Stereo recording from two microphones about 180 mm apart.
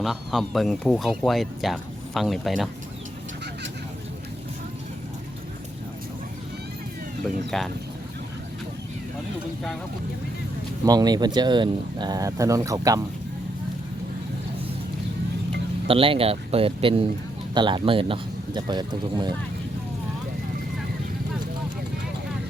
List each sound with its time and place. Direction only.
0.0 s speech: centre (ahead or behind)
7.5 s speech: 5° left (ahead or behind)
10.8 s speech: 20° right (ahead or behind)
15.9 s speech: 30° right (ahead or behind)